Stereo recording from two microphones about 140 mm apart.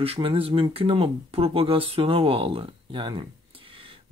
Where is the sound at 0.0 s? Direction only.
45° right (ahead or behind).